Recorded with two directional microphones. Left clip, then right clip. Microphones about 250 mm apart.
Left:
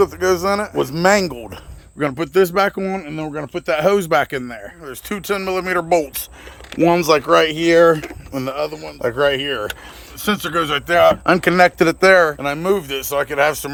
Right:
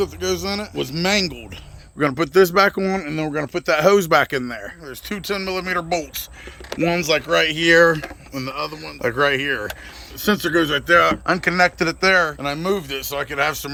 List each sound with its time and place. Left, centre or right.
0.0 s a man's voice: centre
4.9 s a man's voice: centre
11.3 s a man's voice: left